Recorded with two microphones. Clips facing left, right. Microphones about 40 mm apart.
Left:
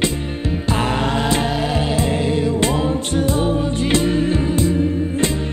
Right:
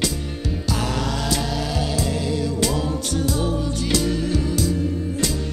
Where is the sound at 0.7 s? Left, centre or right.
Left.